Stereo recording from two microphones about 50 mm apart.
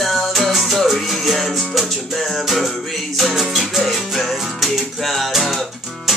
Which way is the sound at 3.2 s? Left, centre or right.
Centre.